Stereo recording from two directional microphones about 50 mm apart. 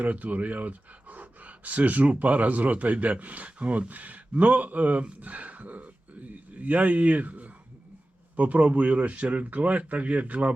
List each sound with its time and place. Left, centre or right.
0.0 s speech: right